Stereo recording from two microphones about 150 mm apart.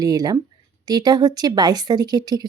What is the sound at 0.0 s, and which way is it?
Speech, 25° right (ahead or behind).